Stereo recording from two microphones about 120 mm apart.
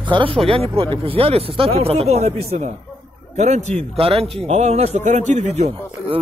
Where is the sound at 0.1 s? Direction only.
45° right (ahead or behind); by 5.7 s 75° right (ahead or behind).